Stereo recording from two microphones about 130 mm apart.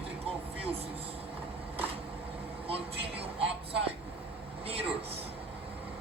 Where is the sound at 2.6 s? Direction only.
45° right (ahead or behind).